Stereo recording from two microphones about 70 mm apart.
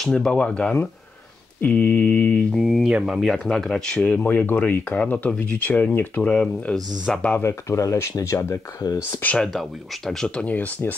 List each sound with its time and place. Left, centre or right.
0.0 s speech: centre
2.5 s speech: centre; by 6.3 s left
6.3 s speech: centre
7.4 s speech: left
9.4 s speech: centre
10.2 s speech: centre